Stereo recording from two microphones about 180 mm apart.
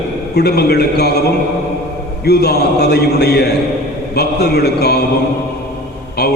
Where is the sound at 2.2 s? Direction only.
60° left (ahead or behind).